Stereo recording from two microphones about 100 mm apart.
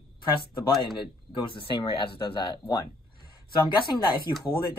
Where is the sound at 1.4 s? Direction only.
55° left (ahead or behind).